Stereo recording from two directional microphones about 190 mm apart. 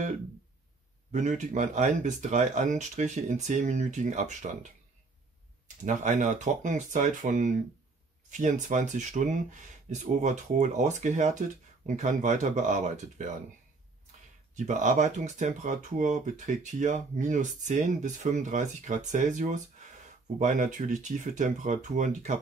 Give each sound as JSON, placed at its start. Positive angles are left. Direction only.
{"t": 1.1, "sound": "speech", "side_deg": -40}
{"t": 5.9, "sound": "speech", "side_deg": -40}
{"t": 14.5, "sound": "speech", "side_deg": -40}